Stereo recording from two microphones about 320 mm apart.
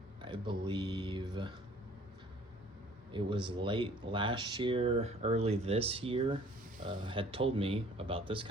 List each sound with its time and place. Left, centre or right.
0.2 s speech: centre
3.1 s speech: centre